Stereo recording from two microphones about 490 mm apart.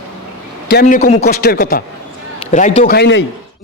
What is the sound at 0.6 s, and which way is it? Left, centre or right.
A man's voice, centre.